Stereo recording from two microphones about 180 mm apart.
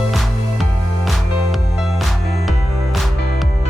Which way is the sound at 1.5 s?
Centre (ahead or behind).